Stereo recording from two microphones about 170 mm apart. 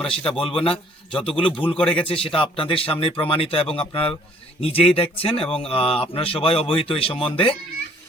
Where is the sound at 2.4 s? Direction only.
30° left (ahead or behind).